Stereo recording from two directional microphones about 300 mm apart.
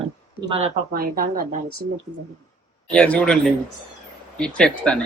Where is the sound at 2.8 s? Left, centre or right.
Centre.